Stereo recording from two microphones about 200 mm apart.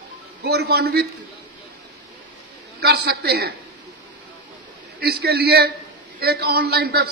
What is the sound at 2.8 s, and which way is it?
Speech, 50° right (ahead or behind).